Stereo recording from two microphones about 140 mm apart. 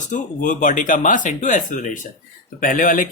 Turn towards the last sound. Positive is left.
turn(degrees=70)  # may be behind; listen again after turning